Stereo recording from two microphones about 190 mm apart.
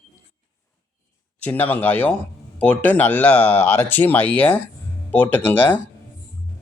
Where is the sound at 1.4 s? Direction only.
10° left (ahead or behind).